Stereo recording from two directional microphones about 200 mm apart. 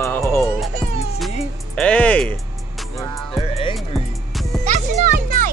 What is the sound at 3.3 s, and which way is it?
Music, 25° left (ahead or behind).